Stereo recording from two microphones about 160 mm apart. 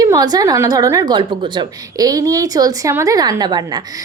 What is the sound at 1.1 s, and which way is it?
A woman's voice, 30° right (ahead or behind).